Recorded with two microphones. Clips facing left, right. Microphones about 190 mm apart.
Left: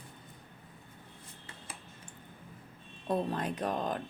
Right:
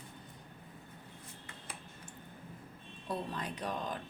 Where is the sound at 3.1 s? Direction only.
50° left (ahead or behind).